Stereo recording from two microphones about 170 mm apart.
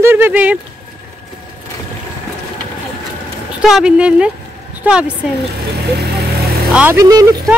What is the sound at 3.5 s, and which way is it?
Speech, 5° right (ahead or behind).